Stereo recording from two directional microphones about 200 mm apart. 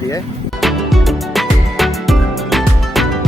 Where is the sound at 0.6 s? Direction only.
Centre (ahead or behind).